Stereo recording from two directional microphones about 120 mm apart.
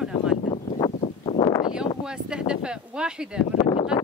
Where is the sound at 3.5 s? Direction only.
50° left (ahead or behind).